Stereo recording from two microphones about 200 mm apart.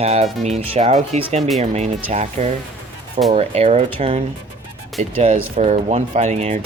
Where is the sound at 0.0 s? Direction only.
30° right (ahead or behind).